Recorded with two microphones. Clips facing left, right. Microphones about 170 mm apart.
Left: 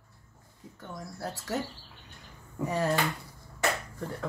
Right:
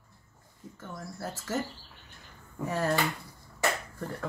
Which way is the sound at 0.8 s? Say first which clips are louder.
Left 1 dB; centre (ahead or behind).